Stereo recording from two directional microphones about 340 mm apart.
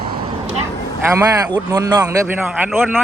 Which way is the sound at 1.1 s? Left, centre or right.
Centre.